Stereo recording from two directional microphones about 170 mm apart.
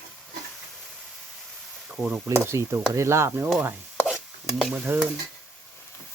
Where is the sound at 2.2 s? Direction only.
15° right (ahead or behind).